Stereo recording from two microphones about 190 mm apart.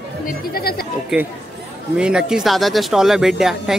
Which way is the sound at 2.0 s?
5° right (ahead or behind).